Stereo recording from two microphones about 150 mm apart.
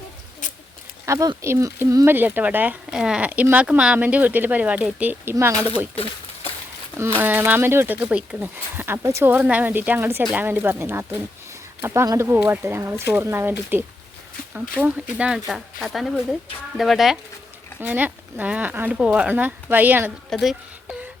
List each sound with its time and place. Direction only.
0.4 s a sound: 60° left (ahead or behind)
1.0 s speech: 20° right (ahead or behind)
7.2 s speech: 10° right (ahead or behind)
20.3 s speech: centre (ahead or behind)